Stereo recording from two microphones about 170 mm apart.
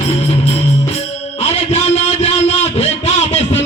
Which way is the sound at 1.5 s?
40° left (ahead or behind).